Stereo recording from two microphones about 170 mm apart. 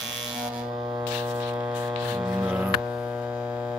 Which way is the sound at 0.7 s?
25° right (ahead or behind).